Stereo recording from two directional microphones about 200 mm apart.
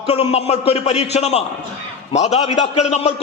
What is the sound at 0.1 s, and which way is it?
A man's voice, 30° left (ahead or behind).